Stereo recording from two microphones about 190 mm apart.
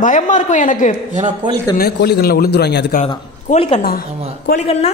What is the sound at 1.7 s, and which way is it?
A woman's voice, 55° left (ahead or behind).